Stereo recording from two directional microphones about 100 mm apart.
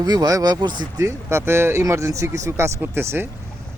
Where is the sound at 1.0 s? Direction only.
25° right (ahead or behind).